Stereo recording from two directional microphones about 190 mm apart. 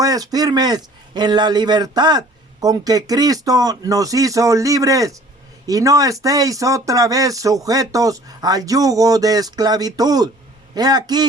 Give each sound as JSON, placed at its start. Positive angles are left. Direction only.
{"t": 0.0, "sound": "speech", "side_deg": -20}